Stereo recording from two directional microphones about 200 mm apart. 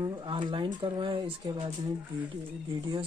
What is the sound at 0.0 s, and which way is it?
Speech, 25° right (ahead or behind).